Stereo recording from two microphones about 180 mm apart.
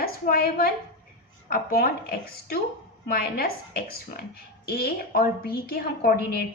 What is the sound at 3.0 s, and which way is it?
A woman's voice, 55° left (ahead or behind).